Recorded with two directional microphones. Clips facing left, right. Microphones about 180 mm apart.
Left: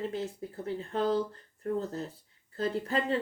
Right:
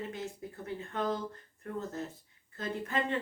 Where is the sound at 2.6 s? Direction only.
35° left (ahead or behind).